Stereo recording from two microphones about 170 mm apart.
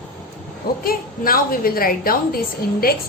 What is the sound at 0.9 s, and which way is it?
A woman's voice, 60° left (ahead or behind).